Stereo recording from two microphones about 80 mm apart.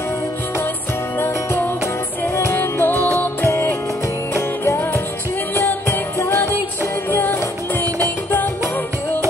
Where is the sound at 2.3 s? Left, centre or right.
Left.